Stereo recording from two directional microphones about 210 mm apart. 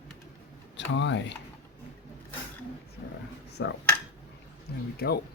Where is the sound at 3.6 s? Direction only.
55° left (ahead or behind).